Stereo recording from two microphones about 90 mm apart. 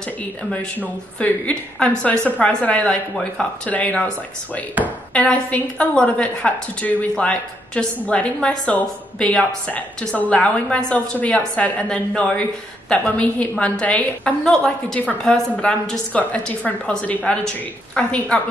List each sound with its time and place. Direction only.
1.2 s a woman's voice: 15° left (ahead or behind)
15.0 s a woman's voice: 15° left (ahead or behind)